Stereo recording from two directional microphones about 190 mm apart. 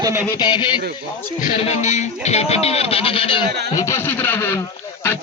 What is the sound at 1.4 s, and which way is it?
Speech, 35° left (ahead or behind).